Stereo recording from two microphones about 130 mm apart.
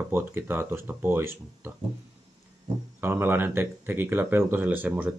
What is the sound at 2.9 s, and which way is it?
Speech, 15° right (ahead or behind).